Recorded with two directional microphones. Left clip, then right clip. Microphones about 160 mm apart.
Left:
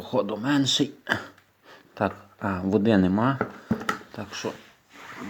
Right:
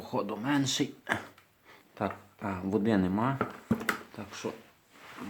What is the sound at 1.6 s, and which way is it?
Speech, 30° left (ahead or behind).